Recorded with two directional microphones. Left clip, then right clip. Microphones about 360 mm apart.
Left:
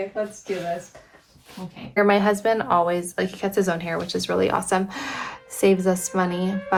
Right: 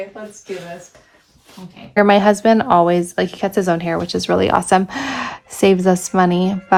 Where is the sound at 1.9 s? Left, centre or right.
Right.